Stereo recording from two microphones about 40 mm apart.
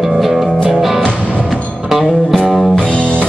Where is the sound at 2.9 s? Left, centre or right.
Left.